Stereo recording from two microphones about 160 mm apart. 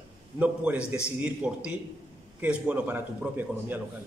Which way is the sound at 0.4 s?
10° right (ahead or behind).